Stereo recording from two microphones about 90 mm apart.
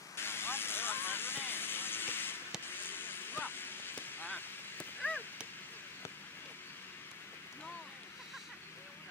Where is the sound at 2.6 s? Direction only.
20° left (ahead or behind).